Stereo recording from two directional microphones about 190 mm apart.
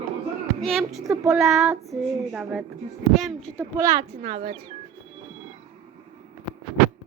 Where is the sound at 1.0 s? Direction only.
15° right (ahead or behind).